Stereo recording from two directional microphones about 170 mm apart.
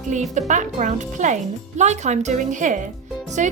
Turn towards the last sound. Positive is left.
turn(degrees=-45)  # may be behind; listen again after turning